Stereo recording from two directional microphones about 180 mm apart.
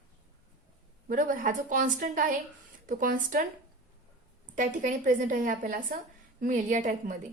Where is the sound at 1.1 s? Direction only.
50° right (ahead or behind).